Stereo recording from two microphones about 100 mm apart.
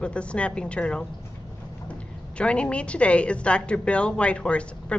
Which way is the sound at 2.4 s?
10° left (ahead or behind).